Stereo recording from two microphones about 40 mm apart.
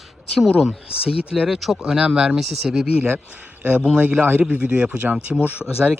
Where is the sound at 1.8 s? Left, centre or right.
Centre.